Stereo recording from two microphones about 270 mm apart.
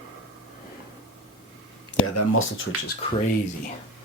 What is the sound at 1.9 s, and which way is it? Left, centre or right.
Speech, left.